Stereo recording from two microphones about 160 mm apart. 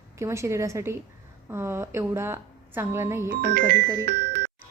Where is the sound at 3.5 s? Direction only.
60° right (ahead or behind).